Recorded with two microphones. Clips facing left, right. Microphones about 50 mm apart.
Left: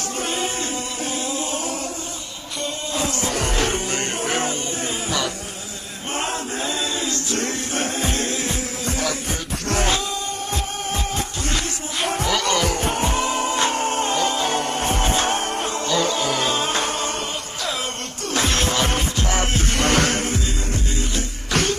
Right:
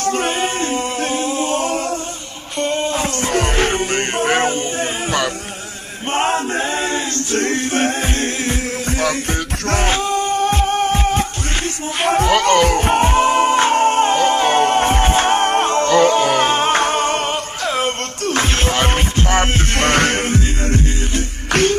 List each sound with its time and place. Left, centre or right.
0.0 s music: right
1.1 s singing: right
2.6 s music: right
6.1 s male singing: right
9.7 s music: right